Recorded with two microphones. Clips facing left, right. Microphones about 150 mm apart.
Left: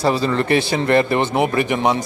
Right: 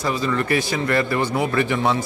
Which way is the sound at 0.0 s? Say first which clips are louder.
Left 4 dB; 30° left (ahead or behind).